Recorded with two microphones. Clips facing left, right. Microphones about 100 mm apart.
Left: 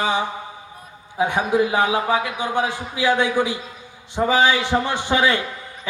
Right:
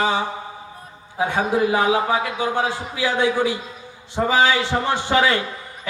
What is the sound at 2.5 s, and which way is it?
A man's voice, 20° left (ahead or behind).